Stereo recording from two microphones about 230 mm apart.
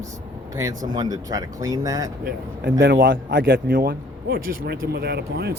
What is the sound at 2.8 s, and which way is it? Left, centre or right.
A man's voice, right.